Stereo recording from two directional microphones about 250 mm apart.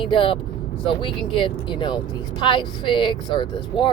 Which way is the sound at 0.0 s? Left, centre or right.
Left.